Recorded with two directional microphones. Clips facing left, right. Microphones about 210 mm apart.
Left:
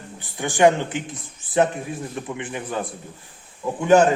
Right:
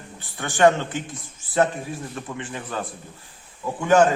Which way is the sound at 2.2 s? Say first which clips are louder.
Left 3 dB; 15° left (ahead or behind).